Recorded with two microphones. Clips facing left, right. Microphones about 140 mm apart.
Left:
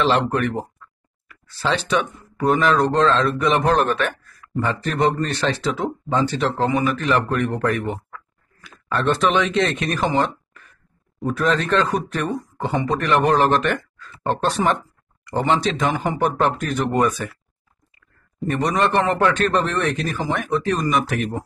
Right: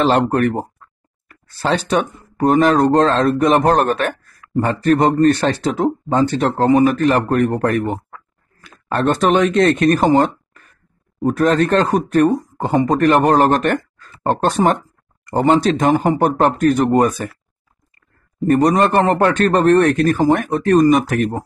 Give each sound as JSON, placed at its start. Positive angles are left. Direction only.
{"t": 0.0, "sound": "speech", "side_deg": -45}
{"t": 18.5, "sound": "speech", "side_deg": -45}